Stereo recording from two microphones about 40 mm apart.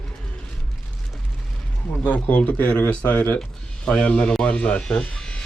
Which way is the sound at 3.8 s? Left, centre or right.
Left.